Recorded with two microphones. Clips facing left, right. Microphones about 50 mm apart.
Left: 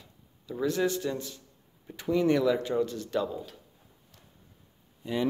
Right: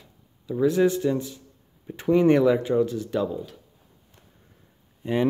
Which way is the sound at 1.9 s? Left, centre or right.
Right.